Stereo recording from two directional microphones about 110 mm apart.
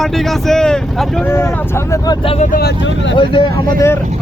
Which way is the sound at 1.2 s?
25° left (ahead or behind).